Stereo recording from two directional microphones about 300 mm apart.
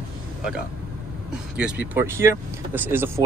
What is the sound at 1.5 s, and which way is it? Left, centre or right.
Speech, centre.